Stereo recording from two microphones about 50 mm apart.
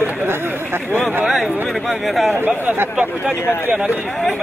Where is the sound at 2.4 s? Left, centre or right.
Right.